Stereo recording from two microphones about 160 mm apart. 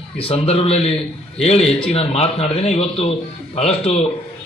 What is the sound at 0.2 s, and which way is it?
A man's voice, 35° left (ahead or behind).